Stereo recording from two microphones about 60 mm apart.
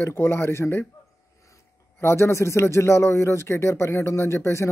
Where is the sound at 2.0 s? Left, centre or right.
Left.